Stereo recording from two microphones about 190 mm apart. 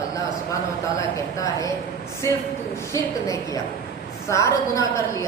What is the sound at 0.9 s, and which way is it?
Speech, 15° left (ahead or behind).